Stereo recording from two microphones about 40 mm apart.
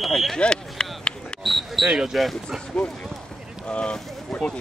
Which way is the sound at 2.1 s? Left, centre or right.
Centre.